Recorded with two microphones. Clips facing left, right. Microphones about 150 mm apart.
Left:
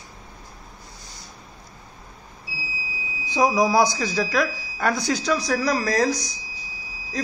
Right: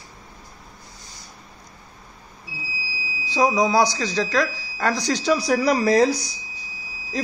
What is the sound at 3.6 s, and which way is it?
A woman's voice, 10° left (ahead or behind).